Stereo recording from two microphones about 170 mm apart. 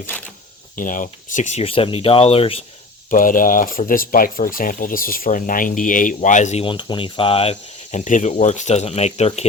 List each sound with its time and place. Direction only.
0.8 s speech: 50° left (ahead or behind); by 2.6 s 35° left (ahead or behind)
3.1 s speech: 55° left (ahead or behind)